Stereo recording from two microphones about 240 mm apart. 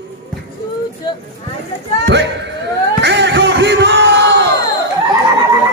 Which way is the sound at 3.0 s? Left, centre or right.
Right.